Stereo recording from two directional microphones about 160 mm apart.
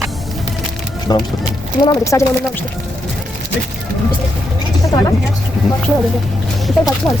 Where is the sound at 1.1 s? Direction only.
25° left (ahead or behind).